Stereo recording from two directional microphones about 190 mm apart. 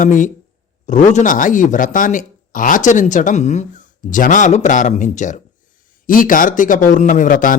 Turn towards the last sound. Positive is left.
turn(degrees=45)  # may be behind; listen again after turning